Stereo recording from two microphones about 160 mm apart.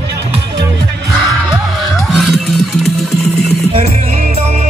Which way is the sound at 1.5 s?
Centre (ahead or behind).